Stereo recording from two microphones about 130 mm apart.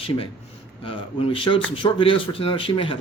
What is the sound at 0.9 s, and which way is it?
Speech, 45° left (ahead or behind).